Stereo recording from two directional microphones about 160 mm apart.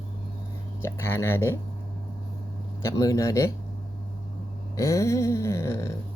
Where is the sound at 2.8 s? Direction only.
20° left (ahead or behind).